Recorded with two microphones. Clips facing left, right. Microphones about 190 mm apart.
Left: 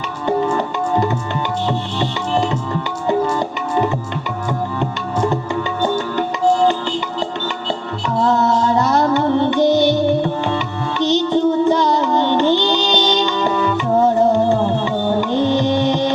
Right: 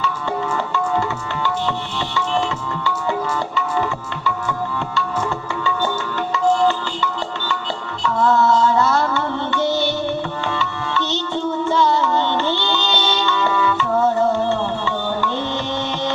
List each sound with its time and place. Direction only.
0.0 s music: 20° left (ahead or behind)
4.4 s music: 20° left (ahead or behind)
13.4 s music: 40° left (ahead or behind)
13.7 s music: 15° left (ahead or behind)